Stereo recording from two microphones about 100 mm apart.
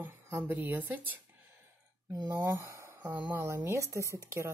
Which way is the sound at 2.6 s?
30° right (ahead or behind).